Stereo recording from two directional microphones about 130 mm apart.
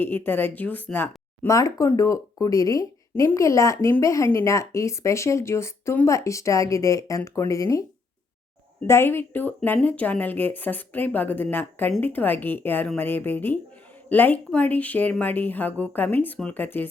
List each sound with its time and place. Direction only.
0.0 s speech: 15° left (ahead or behind)
8.9 s speech: 20° left (ahead or behind)